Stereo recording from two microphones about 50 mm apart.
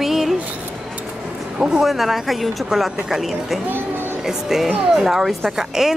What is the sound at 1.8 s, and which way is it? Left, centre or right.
Speech, centre.